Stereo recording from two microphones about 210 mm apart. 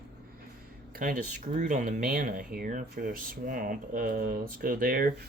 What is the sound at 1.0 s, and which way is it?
Speech, 40° right (ahead or behind).